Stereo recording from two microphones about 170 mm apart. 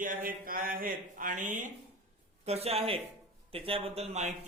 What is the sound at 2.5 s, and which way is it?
Speech, 35° right (ahead or behind).